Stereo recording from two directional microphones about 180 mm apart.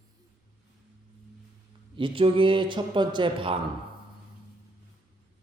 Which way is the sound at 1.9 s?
30° right (ahead or behind).